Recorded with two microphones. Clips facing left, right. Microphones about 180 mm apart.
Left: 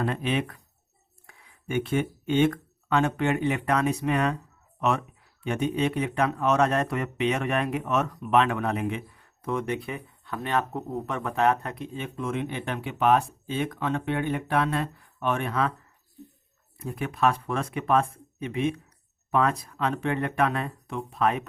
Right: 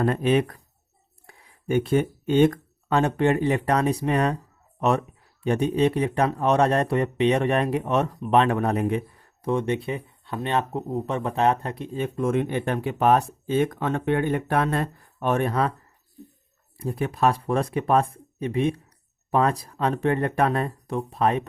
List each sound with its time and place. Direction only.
0.0 s speech: 45° right (ahead or behind)
16.7 s speech: 35° right (ahead or behind)